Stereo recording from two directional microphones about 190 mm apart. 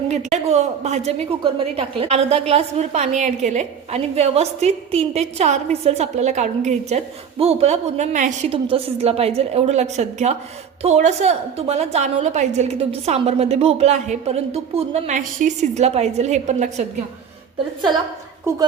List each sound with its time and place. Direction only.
0.1 s a woman's voice: 35° right (ahead or behind)